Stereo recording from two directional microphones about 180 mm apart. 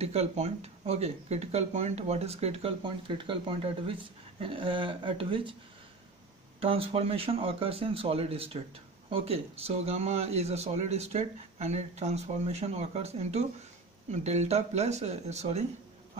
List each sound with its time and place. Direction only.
0.0 s a woman's voice: 35° right (ahead or behind)
6.6 s speech: 30° right (ahead or behind)